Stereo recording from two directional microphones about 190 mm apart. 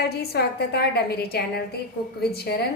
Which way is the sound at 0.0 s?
55° left (ahead or behind).